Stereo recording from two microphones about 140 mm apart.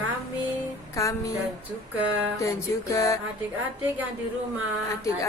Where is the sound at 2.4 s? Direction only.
20° left (ahead or behind).